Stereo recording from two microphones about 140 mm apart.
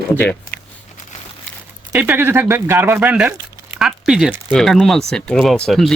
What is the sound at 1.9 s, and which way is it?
Speech, 15° right (ahead or behind).